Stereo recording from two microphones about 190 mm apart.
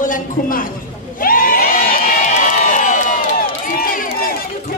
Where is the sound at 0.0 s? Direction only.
45° left (ahead or behind).